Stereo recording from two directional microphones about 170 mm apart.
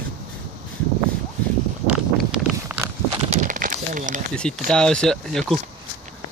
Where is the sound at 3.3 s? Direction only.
50° right (ahead or behind).